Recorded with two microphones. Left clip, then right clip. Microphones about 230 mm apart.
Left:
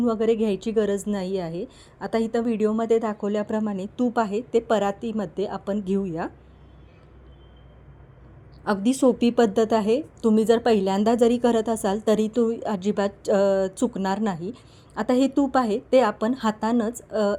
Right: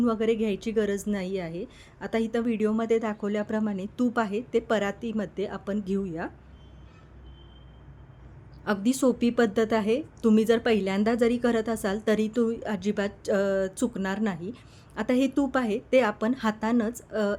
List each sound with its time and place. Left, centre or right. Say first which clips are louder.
0.0 s a woman's voice: left 3 dB; centre
8.6 s a woman's voice: left 4 dB; centre
10.2 s a woman's voice: left 2 dB; right
10.4 s a woman's voice: left 4 dB; centre